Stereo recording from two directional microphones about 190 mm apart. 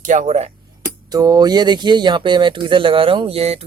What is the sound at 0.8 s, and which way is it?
Speech, 20° right (ahead or behind).